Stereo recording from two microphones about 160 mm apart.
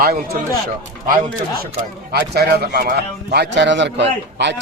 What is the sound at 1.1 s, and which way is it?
Speech, 60° right (ahead or behind).